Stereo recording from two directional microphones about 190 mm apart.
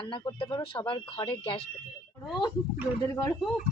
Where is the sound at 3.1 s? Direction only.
15° left (ahead or behind).